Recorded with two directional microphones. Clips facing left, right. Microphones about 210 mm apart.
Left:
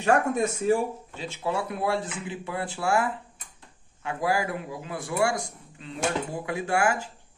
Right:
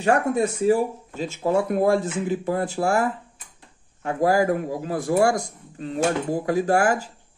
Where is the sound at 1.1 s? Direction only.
45° right (ahead or behind).